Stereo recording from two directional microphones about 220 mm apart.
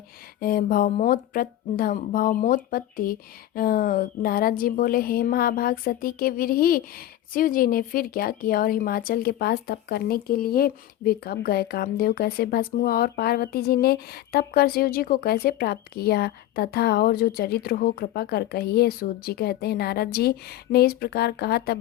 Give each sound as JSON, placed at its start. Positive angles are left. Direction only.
{"t": 0.3, "sound": "a woman's voice", "side_deg": 40}